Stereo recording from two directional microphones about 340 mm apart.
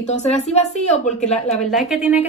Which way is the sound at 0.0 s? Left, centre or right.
Centre.